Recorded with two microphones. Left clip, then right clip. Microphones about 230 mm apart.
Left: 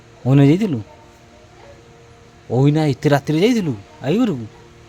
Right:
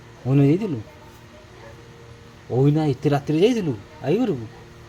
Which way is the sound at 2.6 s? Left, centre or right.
Left.